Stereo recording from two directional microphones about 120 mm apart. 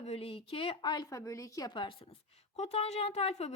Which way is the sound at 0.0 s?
55° left (ahead or behind).